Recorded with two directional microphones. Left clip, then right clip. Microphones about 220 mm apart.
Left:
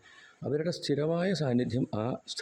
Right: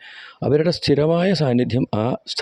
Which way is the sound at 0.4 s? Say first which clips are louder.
Right 13 dB; 40° right (ahead or behind).